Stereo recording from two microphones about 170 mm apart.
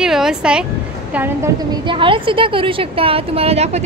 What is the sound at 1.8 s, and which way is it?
A woman's voice, 30° right (ahead or behind).